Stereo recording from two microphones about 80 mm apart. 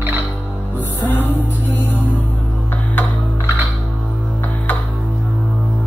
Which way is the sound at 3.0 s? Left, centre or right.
Left.